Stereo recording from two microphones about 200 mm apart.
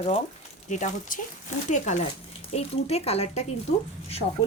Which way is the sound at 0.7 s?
40° left (ahead or behind).